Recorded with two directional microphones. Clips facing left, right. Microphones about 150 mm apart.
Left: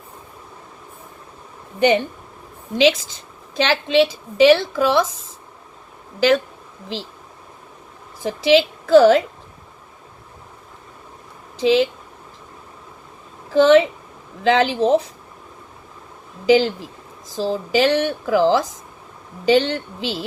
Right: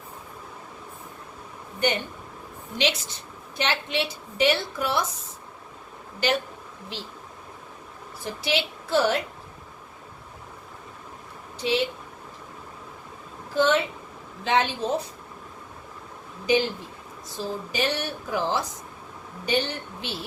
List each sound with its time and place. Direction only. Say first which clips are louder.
2.7 s a woman's voice: left 10 dB; 90° left
6.2 s a woman's voice: left 9 dB; 90° left
8.2 s a woman's voice: left 12 dB; 90° left
11.5 s speech: left 9 dB; 90° left
13.5 s a woman's voice: left 10 dB; 90° left
16.5 s a woman's voice: left 8 dB; 90° left